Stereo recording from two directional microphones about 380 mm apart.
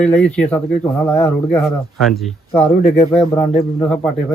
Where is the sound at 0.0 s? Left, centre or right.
Centre.